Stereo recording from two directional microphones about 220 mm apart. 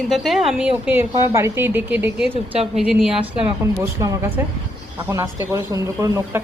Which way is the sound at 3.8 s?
15° right (ahead or behind).